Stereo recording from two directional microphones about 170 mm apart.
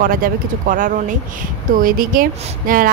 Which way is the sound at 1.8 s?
55° right (ahead or behind).